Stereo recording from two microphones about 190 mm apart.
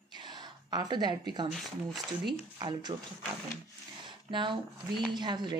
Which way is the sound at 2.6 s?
20° right (ahead or behind).